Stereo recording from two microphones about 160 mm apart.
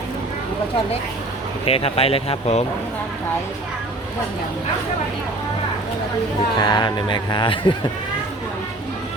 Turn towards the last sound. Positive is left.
turn(degrees=30)  # may be behind; listen again after turning